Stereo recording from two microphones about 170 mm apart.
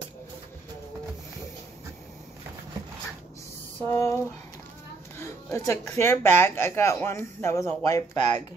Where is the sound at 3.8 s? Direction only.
15° left (ahead or behind).